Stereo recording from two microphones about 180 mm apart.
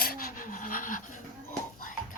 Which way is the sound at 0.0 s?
55° left (ahead or behind).